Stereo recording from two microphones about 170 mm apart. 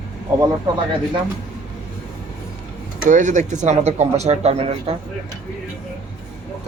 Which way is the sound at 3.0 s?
50° right (ahead or behind).